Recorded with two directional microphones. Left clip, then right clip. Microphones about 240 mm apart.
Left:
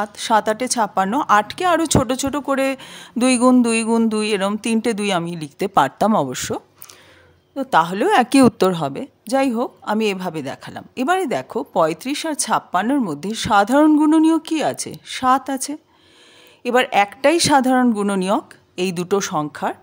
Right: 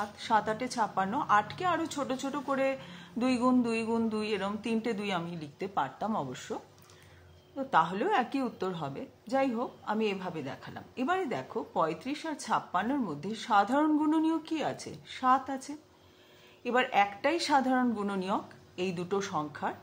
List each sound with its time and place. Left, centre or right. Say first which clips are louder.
0.0 s a woman's voice: left 11 dB; left